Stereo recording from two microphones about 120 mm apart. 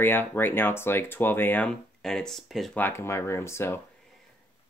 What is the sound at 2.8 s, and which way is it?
Speech, 20° left (ahead or behind).